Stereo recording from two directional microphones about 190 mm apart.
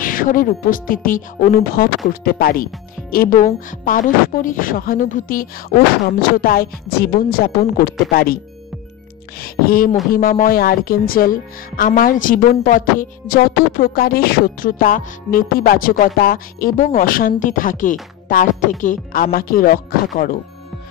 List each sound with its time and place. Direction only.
0.0 s a woman's voice: 45° left (ahead or behind)
9.4 s a woman's voice: 50° left (ahead or behind)